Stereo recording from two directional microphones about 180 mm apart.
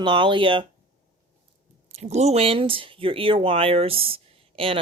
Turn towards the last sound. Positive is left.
turn(degrees=-30)  # may be behind; listen again after turning